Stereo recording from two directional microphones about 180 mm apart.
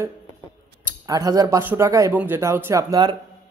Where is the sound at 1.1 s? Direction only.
20° right (ahead or behind).